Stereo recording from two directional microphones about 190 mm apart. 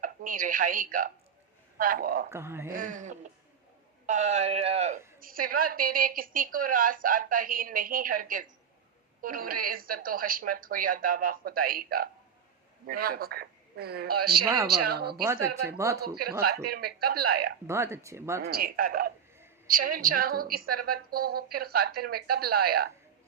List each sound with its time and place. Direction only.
0.0 s a woman's voice: 45° right (ahead or behind)
2.3 s speech: 15° right (ahead or behind)
2.7 s speech: 45° right (ahead or behind)
5.2 s a woman's voice: 50° right (ahead or behind)
15.2 s speech: 15° right (ahead or behind)
16.6 s a man's voice: 55° right (ahead or behind)
17.7 s speech: 15° right (ahead or behind)
18.4 s a woman's voice: 50° right (ahead or behind)